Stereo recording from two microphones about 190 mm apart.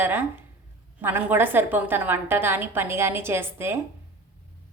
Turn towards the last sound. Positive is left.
turn(degrees=-10)  # may be behind; listen again after turning